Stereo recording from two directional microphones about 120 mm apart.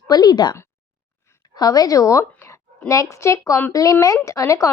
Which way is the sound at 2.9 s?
25° left (ahead or behind).